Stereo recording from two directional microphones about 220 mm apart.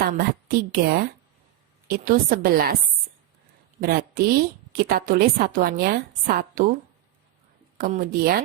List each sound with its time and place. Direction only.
0.0 s a woman's voice: 40° right (ahead or behind)
3.8 s a woman's voice: 40° right (ahead or behind)
7.8 s a woman's voice: 40° right (ahead or behind)